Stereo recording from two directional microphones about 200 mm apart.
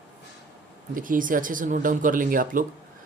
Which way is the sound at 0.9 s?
40° right (ahead or behind).